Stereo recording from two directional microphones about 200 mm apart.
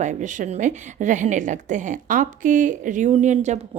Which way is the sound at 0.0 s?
40° right (ahead or behind).